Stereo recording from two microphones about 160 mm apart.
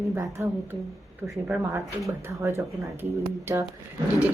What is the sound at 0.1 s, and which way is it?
Speech, 15° right (ahead or behind).